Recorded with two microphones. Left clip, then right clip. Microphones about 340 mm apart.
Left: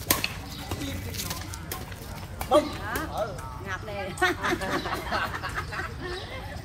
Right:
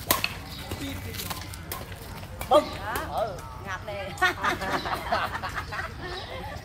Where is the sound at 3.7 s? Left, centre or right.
Right.